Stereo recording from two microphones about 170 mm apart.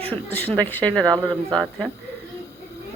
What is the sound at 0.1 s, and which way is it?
Speech, 10° left (ahead or behind).